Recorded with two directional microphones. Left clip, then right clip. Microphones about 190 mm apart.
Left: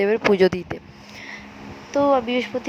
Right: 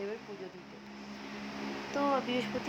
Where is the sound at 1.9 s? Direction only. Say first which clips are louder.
Left 13 dB; 35° left (ahead or behind).